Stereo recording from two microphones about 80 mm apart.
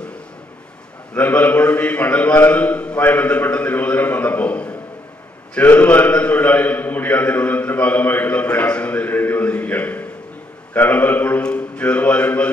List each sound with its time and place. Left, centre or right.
1.1 s a man's voice: centre